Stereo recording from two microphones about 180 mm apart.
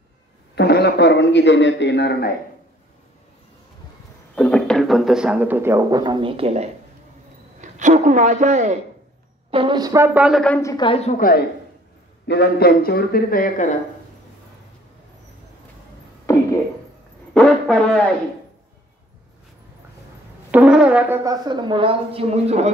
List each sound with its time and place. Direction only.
0.6 s a man's voice: 65° left (ahead or behind)
4.4 s a man's voice: 5° left (ahead or behind); by 8.7 s 40° right (ahead or behind)
9.5 s speech: 30° right (ahead or behind); by 10.4 s 5° right (ahead or behind)
10.4 s a woman's voice: 10° left (ahead or behind)
10.9 s a woman's voice: 35° left (ahead or behind)
11.1 s a man's voice: 50° left (ahead or behind)
17.3 s speech: 5° left (ahead or behind)
20.5 s speech: 5° right (ahead or behind); by 22.7 s 35° right (ahead or behind)